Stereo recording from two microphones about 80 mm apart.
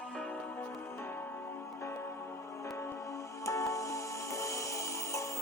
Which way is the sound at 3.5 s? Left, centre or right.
Left.